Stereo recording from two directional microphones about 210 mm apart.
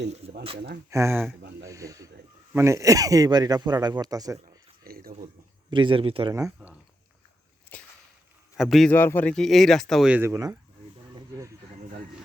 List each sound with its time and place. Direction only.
0.2 s a sound: 30° right (ahead or behind)
0.9 s speech: 15° right (ahead or behind)
1.6 s snake: 15° right (ahead or behind)
2.5 s speech: 15° right (ahead or behind)
4.8 s a sound: 45° right (ahead or behind)
5.7 s speech: 25° right (ahead or behind)
7.7 s whip: 5° left (ahead or behind)
8.5 s speech: centre (ahead or behind)